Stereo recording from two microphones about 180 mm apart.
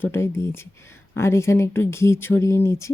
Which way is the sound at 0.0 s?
15° left (ahead or behind).